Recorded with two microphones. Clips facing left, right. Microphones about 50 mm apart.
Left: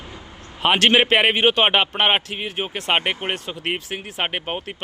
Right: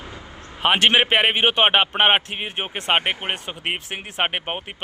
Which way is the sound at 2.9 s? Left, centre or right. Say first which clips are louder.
Even; centre.